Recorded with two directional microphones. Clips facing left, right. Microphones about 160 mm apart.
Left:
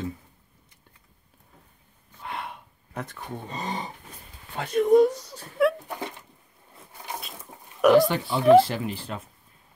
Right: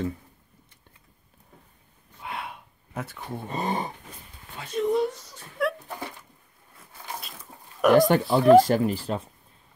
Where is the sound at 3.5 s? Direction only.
50° right (ahead or behind).